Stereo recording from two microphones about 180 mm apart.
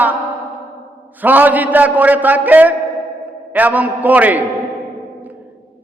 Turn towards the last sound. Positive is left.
turn(degrees=-10)  # may be behind; listen again after turning